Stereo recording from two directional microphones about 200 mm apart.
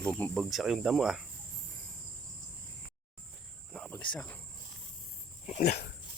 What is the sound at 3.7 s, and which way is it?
Cricket, 10° left (ahead or behind).